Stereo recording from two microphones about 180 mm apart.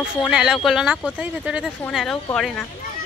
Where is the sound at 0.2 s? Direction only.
5° right (ahead or behind).